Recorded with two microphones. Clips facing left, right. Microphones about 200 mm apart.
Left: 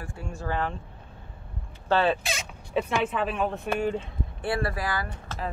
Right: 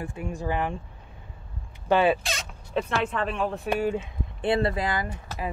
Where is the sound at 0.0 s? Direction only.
20° right (ahead or behind).